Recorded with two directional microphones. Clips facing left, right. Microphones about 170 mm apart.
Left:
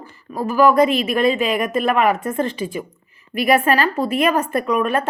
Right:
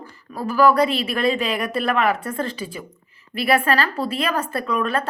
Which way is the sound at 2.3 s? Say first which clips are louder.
Left 5 dB; 20° left (ahead or behind).